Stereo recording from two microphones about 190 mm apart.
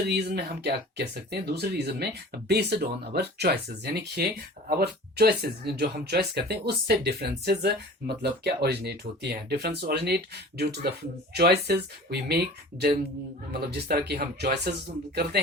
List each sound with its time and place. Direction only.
0.1 s speech: 60° right (ahead or behind)